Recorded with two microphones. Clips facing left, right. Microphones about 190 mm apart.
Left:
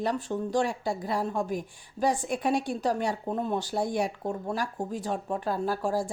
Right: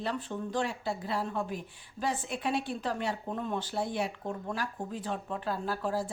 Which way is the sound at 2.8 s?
40° left (ahead or behind).